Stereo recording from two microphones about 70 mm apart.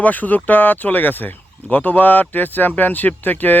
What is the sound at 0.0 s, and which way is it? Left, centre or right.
Speech, left.